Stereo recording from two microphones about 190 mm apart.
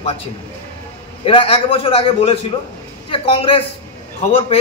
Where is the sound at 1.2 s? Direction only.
30° left (ahead or behind).